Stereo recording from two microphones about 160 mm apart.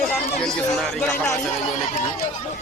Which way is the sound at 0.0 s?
5° left (ahead or behind).